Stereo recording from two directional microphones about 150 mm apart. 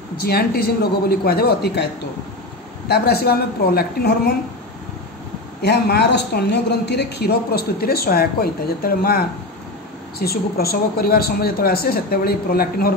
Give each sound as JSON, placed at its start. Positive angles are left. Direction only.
{"t": 0.2, "sound": "a woman's voice", "side_deg": 90}
{"t": 2.9, "sound": "a woman's voice", "side_deg": 90}
{"t": 5.6, "sound": "a woman's voice", "side_deg": 90}